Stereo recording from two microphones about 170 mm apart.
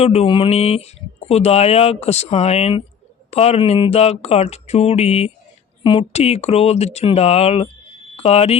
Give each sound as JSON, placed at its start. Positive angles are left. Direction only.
{"t": 0.0, "sound": "speech", "side_deg": 35}